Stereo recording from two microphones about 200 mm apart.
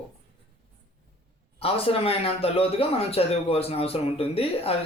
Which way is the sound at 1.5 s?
30° left (ahead or behind).